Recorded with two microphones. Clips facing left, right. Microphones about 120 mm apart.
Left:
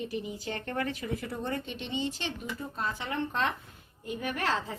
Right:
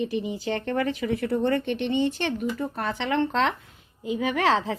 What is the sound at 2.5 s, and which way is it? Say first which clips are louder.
Speech: right 6 dB; 75° right (ahead or behind).